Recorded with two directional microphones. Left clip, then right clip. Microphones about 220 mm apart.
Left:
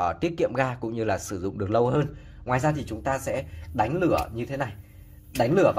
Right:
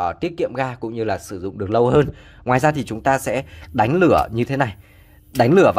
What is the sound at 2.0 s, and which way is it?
Speech, 40° right (ahead or behind).